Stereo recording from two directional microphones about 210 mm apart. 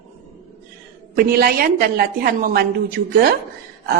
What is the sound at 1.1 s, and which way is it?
Mantra, 45° right (ahead or behind).